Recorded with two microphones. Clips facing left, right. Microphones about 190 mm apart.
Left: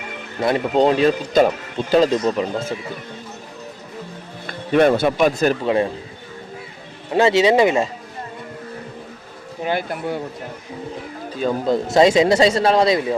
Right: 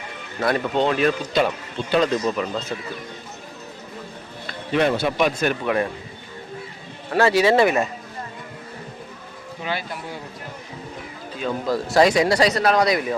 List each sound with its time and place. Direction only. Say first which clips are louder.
0.7 s speech: left 7 dB; 35° left (ahead or behind)
2.1 s speech: left 3 dB; 30° left (ahead or behind)
4.4 s speech: left 5 dB; 50° left (ahead or behind)
5.2 s speech: left 3 dB; 40° left (ahead or behind)
5.6 s speech: left 4 dB; 25° left (ahead or behind)
7.1 s speech: left 2 dB; 20° left (ahead or behind)
9.6 s speech: left 7 dB; 55° left (ahead or behind)
11.3 s speech: left 5 dB; 40° left (ahead or behind)
11.7 s speech: left 3 dB; 20° left (ahead or behind)